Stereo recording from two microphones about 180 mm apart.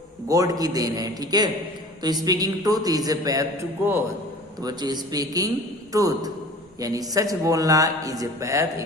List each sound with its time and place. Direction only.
0.3 s a man's voice: 20° right (ahead or behind)